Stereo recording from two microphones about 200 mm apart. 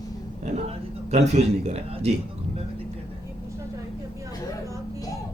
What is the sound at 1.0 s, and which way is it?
Speech, 30° right (ahead or behind).